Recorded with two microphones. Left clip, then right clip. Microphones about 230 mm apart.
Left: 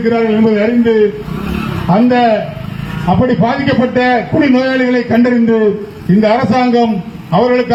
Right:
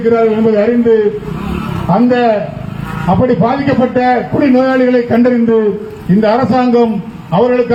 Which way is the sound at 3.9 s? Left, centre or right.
Left.